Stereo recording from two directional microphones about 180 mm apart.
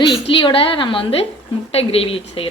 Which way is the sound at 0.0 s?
30° left (ahead or behind).